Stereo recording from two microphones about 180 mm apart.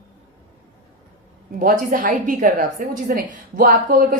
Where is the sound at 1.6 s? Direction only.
50° right (ahead or behind).